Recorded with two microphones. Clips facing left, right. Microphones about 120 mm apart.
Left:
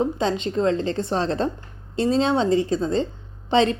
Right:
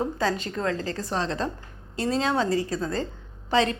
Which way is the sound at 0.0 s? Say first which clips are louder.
Left 4 dB; 25° left (ahead or behind).